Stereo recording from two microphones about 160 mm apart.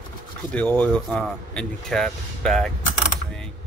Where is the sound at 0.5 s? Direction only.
10° left (ahead or behind).